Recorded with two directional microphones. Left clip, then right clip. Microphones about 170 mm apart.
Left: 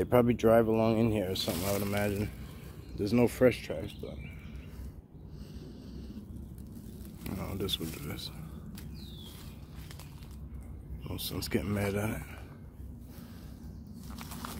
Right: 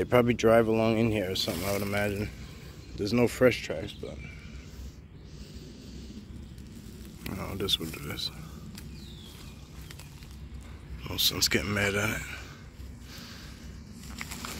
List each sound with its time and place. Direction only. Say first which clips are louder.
0.0 s speech: right 2 dB; centre (ahead or behind)
3.5 s speech: right 4 dB; 15° right (ahead or behind)
7.2 s speech: right 5 dB; 5° left (ahead or behind)
11.1 s speech: right 11 dB; 10° left (ahead or behind)
14.1 s a sound: right 5 dB; 5° right (ahead or behind)